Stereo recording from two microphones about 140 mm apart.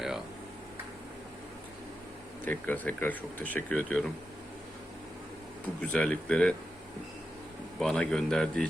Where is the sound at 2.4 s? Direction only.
10° left (ahead or behind).